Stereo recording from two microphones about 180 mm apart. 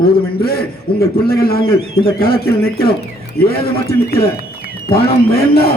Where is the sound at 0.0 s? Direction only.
60° left (ahead or behind).